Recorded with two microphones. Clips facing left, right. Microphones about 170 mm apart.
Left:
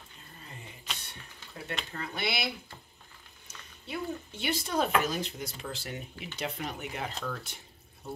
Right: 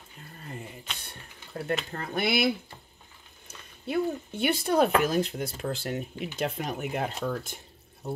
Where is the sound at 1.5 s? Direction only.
50° right (ahead or behind).